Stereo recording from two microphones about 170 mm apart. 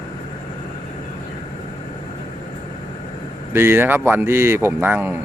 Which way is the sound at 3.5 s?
15° right (ahead or behind).